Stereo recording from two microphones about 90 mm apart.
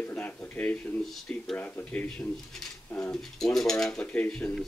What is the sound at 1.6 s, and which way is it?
Speech, 15° left (ahead or behind).